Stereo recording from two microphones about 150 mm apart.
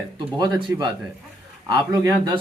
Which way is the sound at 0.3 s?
30° right (ahead or behind).